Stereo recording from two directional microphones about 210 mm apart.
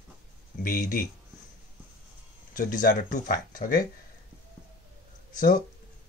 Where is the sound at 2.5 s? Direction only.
40° left (ahead or behind).